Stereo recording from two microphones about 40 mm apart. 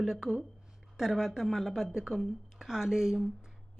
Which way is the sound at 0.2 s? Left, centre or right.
Centre.